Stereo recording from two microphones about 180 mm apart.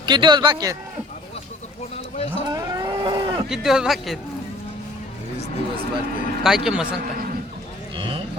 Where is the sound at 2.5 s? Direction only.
20° right (ahead or behind).